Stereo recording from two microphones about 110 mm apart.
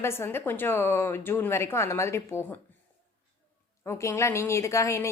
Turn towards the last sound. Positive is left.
turn(degrees=25)  # may be behind; listen again after turning